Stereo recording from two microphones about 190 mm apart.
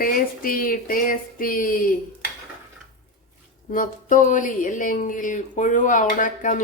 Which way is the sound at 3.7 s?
45° left (ahead or behind).